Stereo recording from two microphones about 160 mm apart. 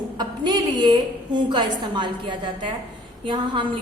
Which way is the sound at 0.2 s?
25° right (ahead or behind).